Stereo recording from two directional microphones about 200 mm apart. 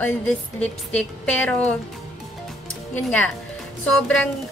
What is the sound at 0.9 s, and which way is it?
Speech, 5° left (ahead or behind).